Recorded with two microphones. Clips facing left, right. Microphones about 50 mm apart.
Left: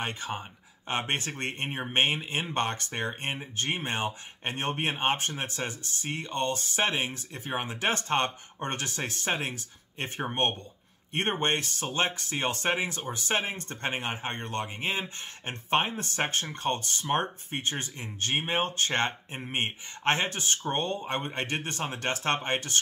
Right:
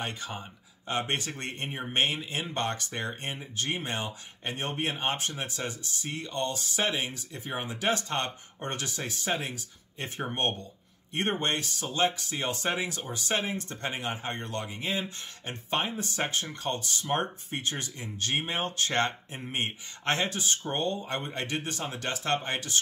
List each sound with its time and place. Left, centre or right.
0.0 s speech: left
12.7 s speech: left